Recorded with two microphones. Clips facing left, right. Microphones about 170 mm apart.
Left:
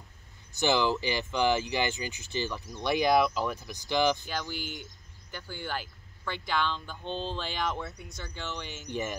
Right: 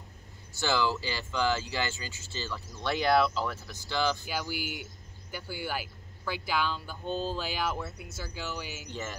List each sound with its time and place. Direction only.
0.5 s speech: 20° left (ahead or behind)
4.3 s speech: 10° right (ahead or behind)